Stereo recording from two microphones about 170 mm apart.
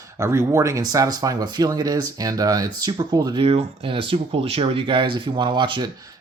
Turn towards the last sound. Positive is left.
turn(degrees=-30)  # may be behind; listen again after turning